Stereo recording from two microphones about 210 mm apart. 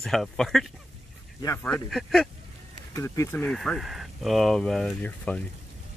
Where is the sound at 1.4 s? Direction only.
10° left (ahead or behind).